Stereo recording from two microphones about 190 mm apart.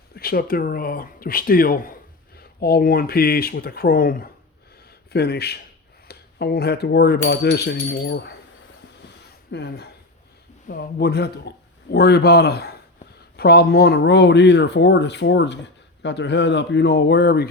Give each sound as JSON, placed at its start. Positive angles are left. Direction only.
{"t": 0.1, "sound": "speech", "side_deg": 50}
{"t": 9.2, "sound": "a sound", "side_deg": 60}
{"t": 10.7, "sound": "speech", "side_deg": 55}